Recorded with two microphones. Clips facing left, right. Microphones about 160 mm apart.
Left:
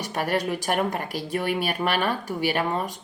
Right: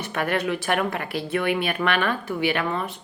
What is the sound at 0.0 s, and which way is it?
Speech, 40° left (ahead or behind).